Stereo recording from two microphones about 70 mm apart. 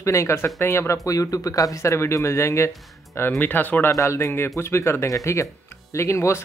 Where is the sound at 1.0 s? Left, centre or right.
Left.